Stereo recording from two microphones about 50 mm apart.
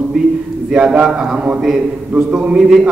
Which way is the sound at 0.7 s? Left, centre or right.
Centre.